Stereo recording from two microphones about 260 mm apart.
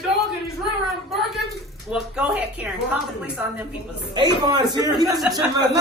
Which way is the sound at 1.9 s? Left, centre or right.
Centre.